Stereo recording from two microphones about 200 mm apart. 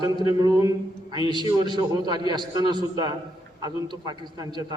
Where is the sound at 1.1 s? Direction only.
25° left (ahead or behind).